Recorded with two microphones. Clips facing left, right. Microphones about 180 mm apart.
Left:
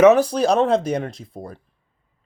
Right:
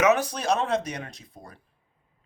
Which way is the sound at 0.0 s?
35° left (ahead or behind).